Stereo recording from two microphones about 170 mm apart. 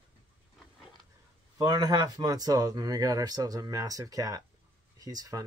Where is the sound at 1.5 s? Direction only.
25° right (ahead or behind).